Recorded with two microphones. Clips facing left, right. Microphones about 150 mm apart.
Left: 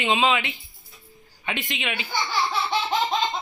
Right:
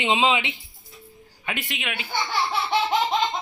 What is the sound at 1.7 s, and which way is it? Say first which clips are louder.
Speech: left 2 dB; 5° right (ahead or behind).